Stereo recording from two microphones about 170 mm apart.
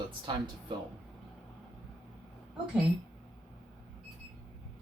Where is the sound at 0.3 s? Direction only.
25° right (ahead or behind).